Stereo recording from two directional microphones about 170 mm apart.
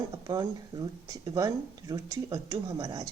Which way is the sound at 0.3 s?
20° right (ahead or behind).